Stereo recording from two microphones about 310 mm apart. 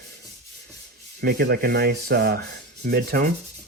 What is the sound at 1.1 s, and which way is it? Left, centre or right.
Sanding, right.